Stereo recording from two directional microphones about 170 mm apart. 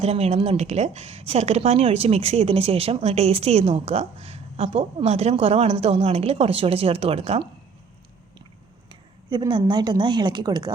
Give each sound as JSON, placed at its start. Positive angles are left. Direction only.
{"t": 0.0, "sound": "speech", "side_deg": -35}
{"t": 8.9, "sound": "speech", "side_deg": -25}